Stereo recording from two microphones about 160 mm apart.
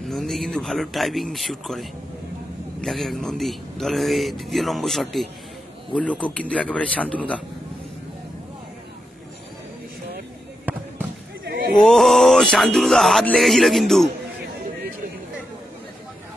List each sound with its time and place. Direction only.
0.1 s a man's voice: centre (ahead or behind)
10.6 s fireworks: 10° right (ahead or behind)
11.4 s a sound: 75° right (ahead or behind)
11.8 s speech: centre (ahead or behind)